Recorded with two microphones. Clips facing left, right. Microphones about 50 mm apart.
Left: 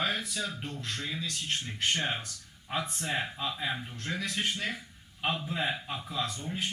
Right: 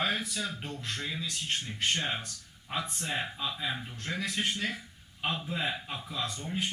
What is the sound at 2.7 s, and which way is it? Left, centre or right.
Speech, centre.